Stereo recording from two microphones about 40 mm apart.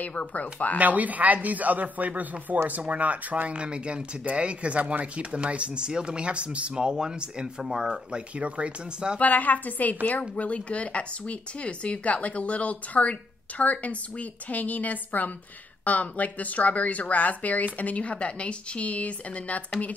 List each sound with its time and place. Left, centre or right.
0.0 s speech: left
0.7 s speech: right
3.5 s speech: right
6.7 s speech: centre
9.2 s a woman's voice: left